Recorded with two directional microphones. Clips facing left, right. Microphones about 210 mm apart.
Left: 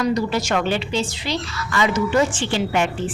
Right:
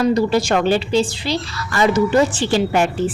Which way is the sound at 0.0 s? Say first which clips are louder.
Right 5 dB; 30° right (ahead or behind).